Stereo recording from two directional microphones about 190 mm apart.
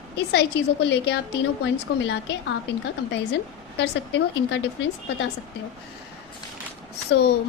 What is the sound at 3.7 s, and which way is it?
Speech, 70° left (ahead or behind).